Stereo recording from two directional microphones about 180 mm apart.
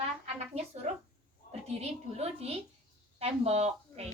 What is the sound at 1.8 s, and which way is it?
A woman's voice, 35° right (ahead or behind).